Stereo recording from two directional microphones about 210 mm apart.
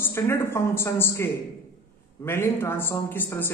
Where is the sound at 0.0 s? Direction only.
10° left (ahead or behind).